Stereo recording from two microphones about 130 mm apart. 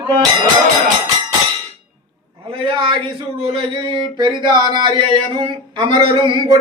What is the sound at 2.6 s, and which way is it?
Speech, 40° right (ahead or behind).